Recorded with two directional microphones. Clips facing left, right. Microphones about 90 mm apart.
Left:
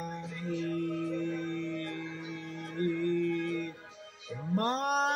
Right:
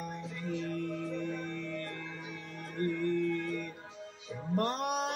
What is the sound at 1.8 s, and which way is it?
Music, 35° right (ahead or behind).